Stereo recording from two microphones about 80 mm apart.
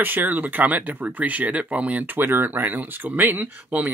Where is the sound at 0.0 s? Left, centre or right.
Right.